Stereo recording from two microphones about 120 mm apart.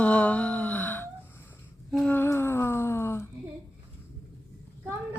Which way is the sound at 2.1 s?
20° left (ahead or behind).